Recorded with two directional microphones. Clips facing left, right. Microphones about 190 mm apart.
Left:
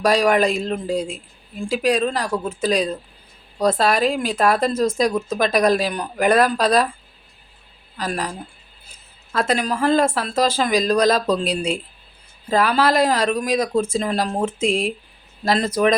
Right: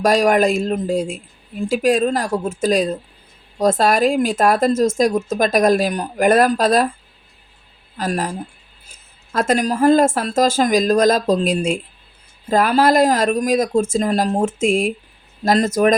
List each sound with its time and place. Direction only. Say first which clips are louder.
0.0 s speech: right 2 dB; 45° right (ahead or behind)
7.9 s speech: right 4 dB; 45° right (ahead or behind)
9.3 s speech: right 3 dB; 45° right (ahead or behind)